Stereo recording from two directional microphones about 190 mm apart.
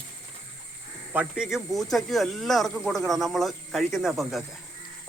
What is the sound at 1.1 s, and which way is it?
Speech, 5° right (ahead or behind).